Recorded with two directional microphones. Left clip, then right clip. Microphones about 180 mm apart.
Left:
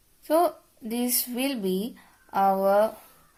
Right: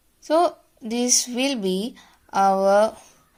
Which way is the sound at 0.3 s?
15° right (ahead or behind).